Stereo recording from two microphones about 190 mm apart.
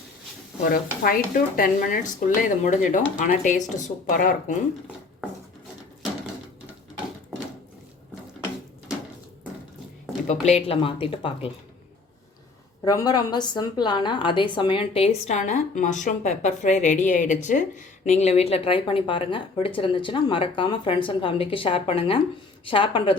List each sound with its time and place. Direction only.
0.6 s speech: 50° left (ahead or behind)
10.4 s speech: 35° left (ahead or behind)
12.8 s a woman's voice: 20° left (ahead or behind)